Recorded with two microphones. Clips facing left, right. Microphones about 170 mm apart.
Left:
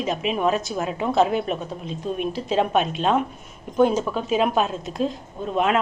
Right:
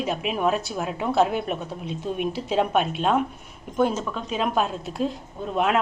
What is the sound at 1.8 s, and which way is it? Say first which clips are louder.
Speech: right 1 dB; 70° right (ahead or behind).